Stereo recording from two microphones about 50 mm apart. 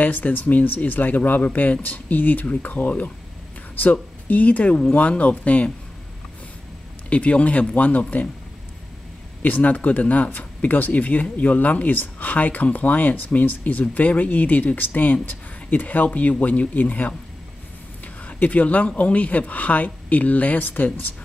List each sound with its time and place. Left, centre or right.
0.0 s speech: left
7.1 s speech: left
9.4 s speech: left